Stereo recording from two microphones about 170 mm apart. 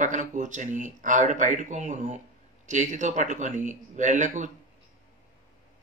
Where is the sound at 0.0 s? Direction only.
45° right (ahead or behind).